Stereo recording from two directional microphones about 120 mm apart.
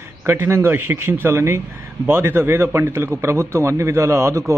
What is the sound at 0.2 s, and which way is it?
A man's voice, 20° right (ahead or behind).